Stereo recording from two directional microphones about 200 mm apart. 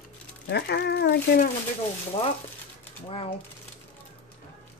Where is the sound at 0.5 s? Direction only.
55° left (ahead or behind).